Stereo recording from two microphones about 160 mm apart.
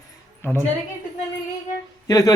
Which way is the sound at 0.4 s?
15° left (ahead or behind).